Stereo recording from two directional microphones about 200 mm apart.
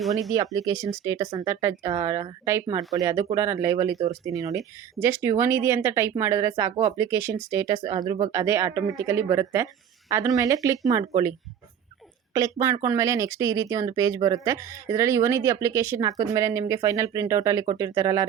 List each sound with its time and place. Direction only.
0.3 s speech: 15° right (ahead or behind)